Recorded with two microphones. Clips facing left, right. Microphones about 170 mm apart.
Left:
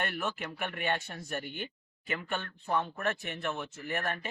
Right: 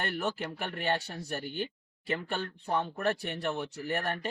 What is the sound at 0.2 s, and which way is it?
Speech, 35° right (ahead or behind).